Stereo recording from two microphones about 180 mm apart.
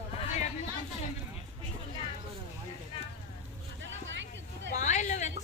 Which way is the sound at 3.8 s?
90° right.